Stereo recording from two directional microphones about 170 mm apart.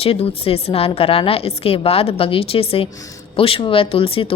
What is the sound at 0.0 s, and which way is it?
Speech, 35° left (ahead or behind).